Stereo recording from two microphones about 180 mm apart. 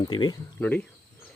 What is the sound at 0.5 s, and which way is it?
Speech, 10° left (ahead or behind).